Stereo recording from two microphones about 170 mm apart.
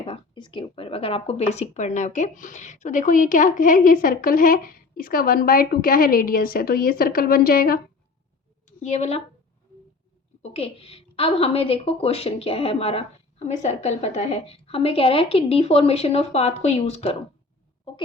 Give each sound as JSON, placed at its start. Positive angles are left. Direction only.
{"t": 0.0, "sound": "speech", "side_deg": 30}
{"t": 8.6, "sound": "a woman's voice", "side_deg": 45}
{"t": 10.4, "sound": "a woman's voice", "side_deg": 35}